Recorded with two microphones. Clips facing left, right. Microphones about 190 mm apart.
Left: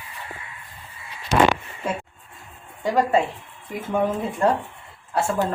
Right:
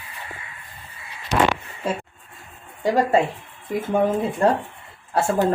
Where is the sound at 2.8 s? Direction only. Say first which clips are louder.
Right 2 dB; 35° right (ahead or behind).